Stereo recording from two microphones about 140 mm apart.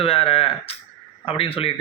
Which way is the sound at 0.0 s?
40° left (ahead or behind).